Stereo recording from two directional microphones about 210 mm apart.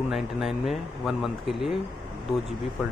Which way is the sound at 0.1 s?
Centre (ahead or behind).